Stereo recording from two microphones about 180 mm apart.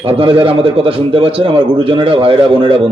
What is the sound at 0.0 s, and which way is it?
A man's voice, 30° right (ahead or behind).